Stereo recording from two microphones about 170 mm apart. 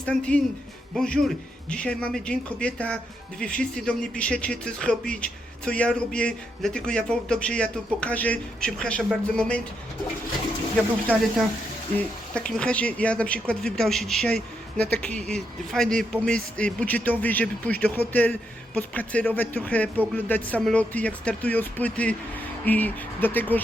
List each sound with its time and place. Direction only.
0.0 s speech: 5° left (ahead or behind)
11.1 s speech: 10° left (ahead or behind)
12.3 s speech: 5° left (ahead or behind)